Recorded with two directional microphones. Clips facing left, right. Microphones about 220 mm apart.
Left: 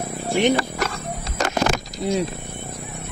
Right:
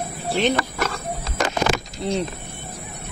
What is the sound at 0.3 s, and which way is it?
Speech, 15° left (ahead or behind).